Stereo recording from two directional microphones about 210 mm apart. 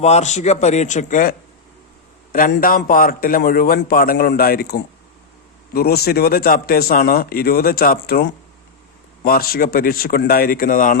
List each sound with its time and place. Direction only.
0.0 s a man's voice: 30° left (ahead or behind)